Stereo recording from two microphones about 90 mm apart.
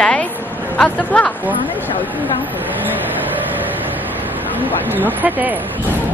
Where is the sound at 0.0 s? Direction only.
10° left (ahead or behind).